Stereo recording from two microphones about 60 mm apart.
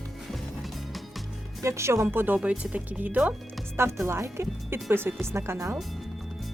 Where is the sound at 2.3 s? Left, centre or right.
Right.